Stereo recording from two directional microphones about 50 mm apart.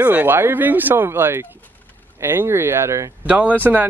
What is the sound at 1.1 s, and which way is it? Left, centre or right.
Speech, right.